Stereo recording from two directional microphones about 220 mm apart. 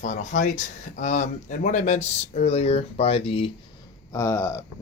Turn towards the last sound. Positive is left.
turn(degrees=10)  # may be behind; listen again after turning